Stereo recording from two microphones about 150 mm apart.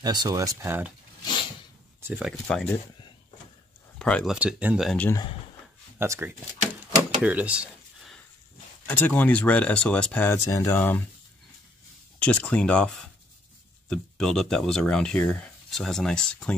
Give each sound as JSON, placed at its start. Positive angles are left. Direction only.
{"t": 0.0, "sound": "speech", "side_deg": -30}
{"t": 2.0, "sound": "speech", "side_deg": -10}
{"t": 2.4, "sound": "speech", "side_deg": 5}
{"t": 4.0, "sound": "speech", "side_deg": 5}
{"t": 4.4, "sound": "speech", "side_deg": -10}
{"t": 5.9, "sound": "speech", "side_deg": -15}
{"t": 7.0, "sound": "a sound", "side_deg": -10}
{"t": 8.8, "sound": "speech", "side_deg": 10}
{"t": 12.2, "sound": "speech", "side_deg": 10}